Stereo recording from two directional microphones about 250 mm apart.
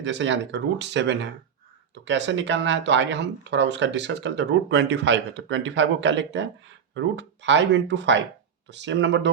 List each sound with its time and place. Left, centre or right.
0.0 s speech: right